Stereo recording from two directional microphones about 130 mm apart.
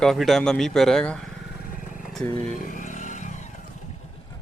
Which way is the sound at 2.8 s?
75° left (ahead or behind).